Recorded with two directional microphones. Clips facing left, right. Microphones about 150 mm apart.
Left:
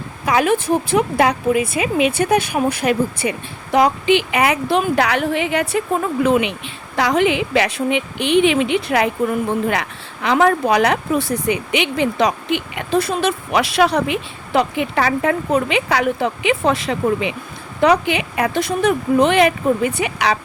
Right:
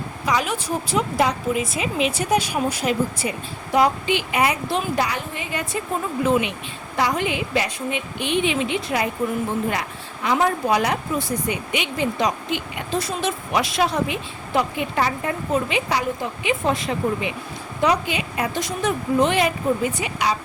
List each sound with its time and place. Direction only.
0.3 s a woman's voice: 55° left (ahead or behind)
6.9 s a woman's voice: 90° left
17.7 s speech: 65° left (ahead or behind)